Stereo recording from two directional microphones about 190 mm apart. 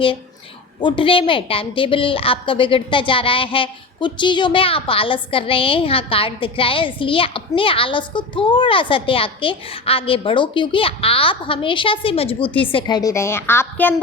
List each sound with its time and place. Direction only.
0.8 s a woman's voice: 25° left (ahead or behind)
12.7 s a woman's voice: 20° left (ahead or behind)